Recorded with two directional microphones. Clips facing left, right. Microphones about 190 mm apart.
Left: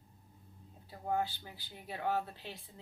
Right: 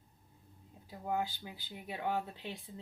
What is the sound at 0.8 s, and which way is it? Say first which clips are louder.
Speech: left 1 dB; 15° right (ahead or behind).